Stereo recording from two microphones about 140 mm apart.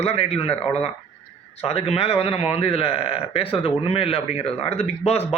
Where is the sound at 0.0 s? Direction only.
45° left (ahead or behind).